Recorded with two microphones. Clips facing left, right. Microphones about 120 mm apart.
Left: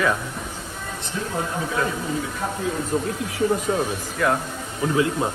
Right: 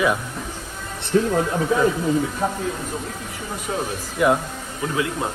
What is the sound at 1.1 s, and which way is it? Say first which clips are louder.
Speech: right 12 dB; 60° right (ahead or behind).